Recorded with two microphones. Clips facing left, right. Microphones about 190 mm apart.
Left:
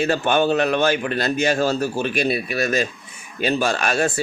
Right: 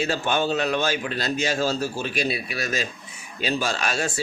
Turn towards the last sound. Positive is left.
turn(degrees=55)  # may be behind; listen again after turning